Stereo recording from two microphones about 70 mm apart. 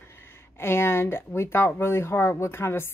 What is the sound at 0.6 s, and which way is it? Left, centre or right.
Speech, left.